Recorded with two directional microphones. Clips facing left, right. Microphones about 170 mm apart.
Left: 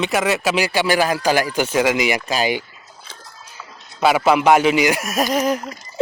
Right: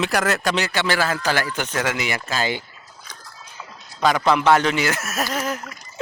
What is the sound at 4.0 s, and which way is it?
Speech, 10° left (ahead or behind).